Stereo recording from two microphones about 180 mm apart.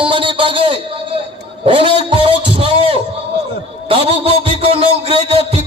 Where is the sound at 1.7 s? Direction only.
30° right (ahead or behind).